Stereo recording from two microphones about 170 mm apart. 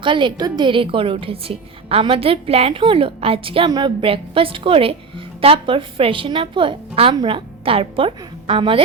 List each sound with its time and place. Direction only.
0.0 s a woman's voice: 30° right (ahead or behind)